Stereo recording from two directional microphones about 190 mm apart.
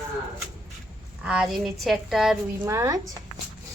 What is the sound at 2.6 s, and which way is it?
Speech, 15° right (ahead or behind).